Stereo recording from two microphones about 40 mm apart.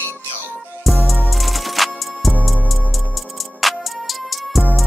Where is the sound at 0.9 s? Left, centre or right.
Centre.